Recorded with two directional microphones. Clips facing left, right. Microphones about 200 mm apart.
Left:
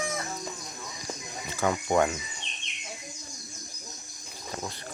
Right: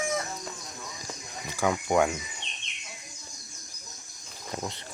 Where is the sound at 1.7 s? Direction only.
5° right (ahead or behind).